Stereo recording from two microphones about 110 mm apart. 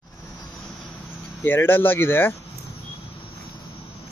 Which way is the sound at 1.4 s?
20° left (ahead or behind).